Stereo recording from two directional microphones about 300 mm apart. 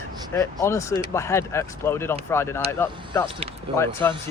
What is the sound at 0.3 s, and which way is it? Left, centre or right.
Speech, centre.